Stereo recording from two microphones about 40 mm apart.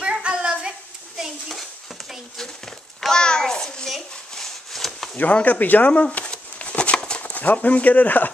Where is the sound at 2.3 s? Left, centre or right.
Centre.